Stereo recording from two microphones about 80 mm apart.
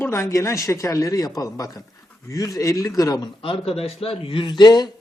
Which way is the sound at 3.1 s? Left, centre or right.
Left.